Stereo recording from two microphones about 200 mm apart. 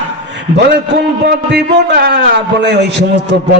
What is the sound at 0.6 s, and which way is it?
A man's voice, 55° right (ahead or behind).